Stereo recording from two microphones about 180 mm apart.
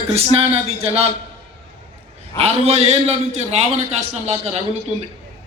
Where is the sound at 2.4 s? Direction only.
35° right (ahead or behind).